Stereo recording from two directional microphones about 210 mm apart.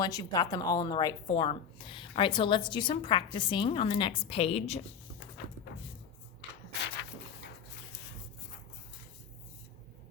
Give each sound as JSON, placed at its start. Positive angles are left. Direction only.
{"t": 0.0, "sound": "a woman's voice", "side_deg": 15}